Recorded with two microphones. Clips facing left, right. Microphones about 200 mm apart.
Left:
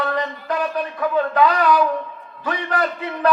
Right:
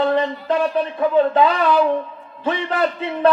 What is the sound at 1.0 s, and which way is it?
A man's voice, 25° right (ahead or behind).